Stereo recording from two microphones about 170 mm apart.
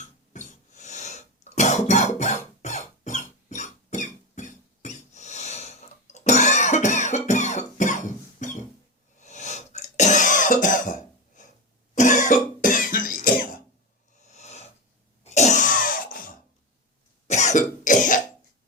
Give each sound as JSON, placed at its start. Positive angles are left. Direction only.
{"t": 0.0, "sound": "cough", "side_deg": 45}
{"t": 14.2, "sound": "snort", "side_deg": 40}
{"t": 15.2, "sound": "cough", "side_deg": 40}
{"t": 17.2, "sound": "cough", "side_deg": 40}